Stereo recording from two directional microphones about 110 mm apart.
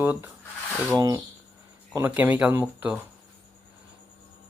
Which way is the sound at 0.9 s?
35° right (ahead or behind).